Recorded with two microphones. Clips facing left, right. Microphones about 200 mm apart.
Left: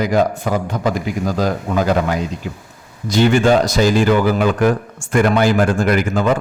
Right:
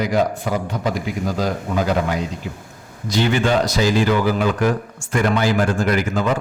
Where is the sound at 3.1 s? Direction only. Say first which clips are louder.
Left 5 dB; 50° left (ahead or behind).